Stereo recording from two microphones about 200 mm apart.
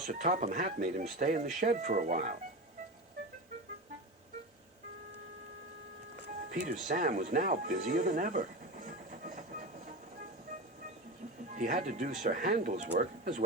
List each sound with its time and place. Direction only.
0.1 s speech: 40° right (ahead or behind)
6.2 s music: 40° right (ahead or behind)
11.5 s speech: 40° right (ahead or behind)